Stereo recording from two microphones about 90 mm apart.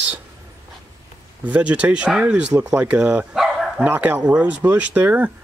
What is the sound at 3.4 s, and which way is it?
Dog, 5° right (ahead or behind).